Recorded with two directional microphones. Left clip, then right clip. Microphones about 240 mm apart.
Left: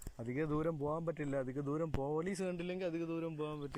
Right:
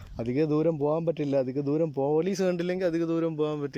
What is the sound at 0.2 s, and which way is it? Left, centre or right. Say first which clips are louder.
A man's voice: right 12 dB; right.